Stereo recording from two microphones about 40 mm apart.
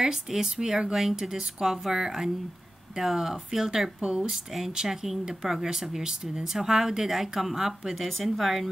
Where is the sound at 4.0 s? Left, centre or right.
Right.